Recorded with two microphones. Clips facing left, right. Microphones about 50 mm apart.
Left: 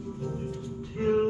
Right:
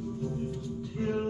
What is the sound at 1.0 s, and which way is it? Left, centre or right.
Music, left.